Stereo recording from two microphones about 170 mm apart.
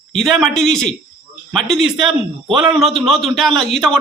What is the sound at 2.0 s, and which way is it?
Speech, 30° right (ahead or behind).